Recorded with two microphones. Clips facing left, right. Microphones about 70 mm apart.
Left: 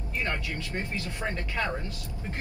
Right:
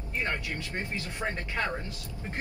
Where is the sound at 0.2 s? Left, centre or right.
Right.